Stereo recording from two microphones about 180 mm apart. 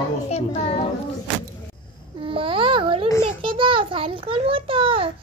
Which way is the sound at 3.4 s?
30° right (ahead or behind).